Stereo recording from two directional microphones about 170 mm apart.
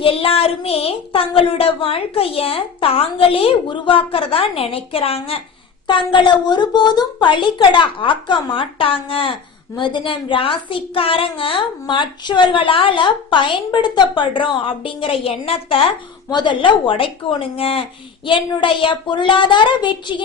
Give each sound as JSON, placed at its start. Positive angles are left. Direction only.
{"t": 0.0, "sound": "a woman's voice", "side_deg": 30}